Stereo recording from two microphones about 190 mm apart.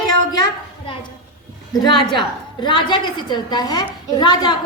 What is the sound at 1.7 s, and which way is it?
A woman's voice, 25° left (ahead or behind).